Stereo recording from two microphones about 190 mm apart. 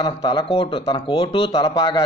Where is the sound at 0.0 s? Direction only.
25° left (ahead or behind).